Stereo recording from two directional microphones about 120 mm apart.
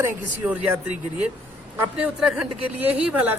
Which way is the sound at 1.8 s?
10° right (ahead or behind).